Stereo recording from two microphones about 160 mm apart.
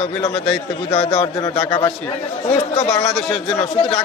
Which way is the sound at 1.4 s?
25° left (ahead or behind).